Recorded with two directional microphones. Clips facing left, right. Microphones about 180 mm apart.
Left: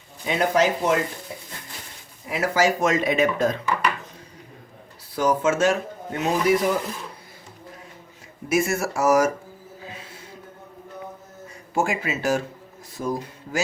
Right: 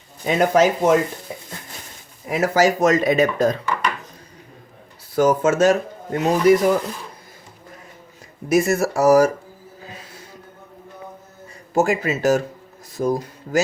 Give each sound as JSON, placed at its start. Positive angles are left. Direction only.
{"t": 0.3, "sound": "speech", "side_deg": -45}
{"t": 2.3, "sound": "speech", "side_deg": -40}
{"t": 5.1, "sound": "speech", "side_deg": -45}
{"t": 8.4, "sound": "speech", "side_deg": -40}
{"t": 11.7, "sound": "speech", "side_deg": -40}